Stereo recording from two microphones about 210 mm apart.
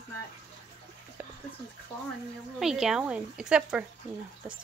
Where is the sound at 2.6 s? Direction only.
Centre (ahead or behind).